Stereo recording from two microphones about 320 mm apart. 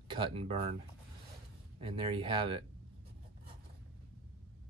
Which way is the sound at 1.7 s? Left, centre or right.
Centre.